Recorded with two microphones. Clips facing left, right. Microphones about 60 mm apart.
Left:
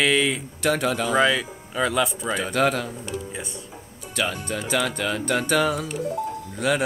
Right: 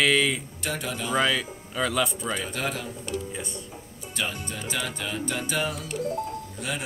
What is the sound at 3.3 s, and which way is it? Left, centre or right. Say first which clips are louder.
Speech: left 1 dB; centre.